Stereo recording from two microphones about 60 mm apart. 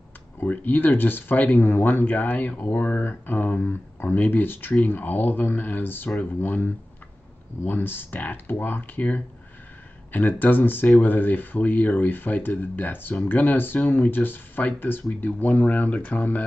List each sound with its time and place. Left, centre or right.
0.4 s speech: left